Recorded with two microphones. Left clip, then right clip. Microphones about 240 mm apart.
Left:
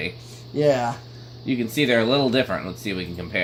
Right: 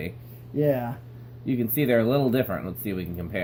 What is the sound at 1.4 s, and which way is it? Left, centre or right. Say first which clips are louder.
A man's voice: left 3 dB; right.